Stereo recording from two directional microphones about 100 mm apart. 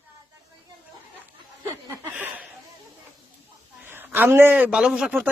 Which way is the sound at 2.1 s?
15° right (ahead or behind).